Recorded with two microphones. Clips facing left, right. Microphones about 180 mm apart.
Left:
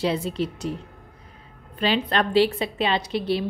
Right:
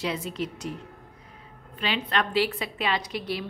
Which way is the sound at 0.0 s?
30° left (ahead or behind).